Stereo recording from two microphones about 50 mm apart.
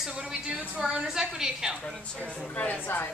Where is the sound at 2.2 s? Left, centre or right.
Left.